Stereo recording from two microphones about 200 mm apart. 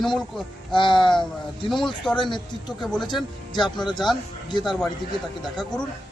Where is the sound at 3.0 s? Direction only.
20° left (ahead or behind).